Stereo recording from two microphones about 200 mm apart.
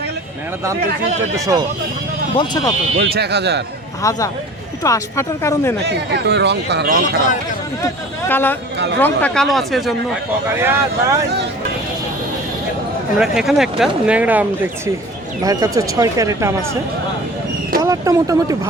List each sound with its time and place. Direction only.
2.3 s speech: 20° left (ahead or behind)
3.0 s speech: 55° right (ahead or behind)
4.0 s speech: 15° left (ahead or behind)
5.8 s speech: 55° right (ahead or behind)
8.3 s speech: 10° left (ahead or behind)
10.5 s speech: 10° right (ahead or behind)
13.1 s speech: centre (ahead or behind)
15.4 s speech: 15° right (ahead or behind)
17.8 s speech: 15° right (ahead or behind)